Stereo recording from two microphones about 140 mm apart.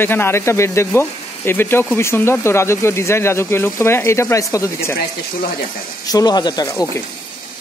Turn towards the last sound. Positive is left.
turn(degrees=25)  # may be behind; listen again after turning